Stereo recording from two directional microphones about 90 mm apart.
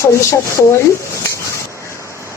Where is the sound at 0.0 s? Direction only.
30° left (ahead or behind).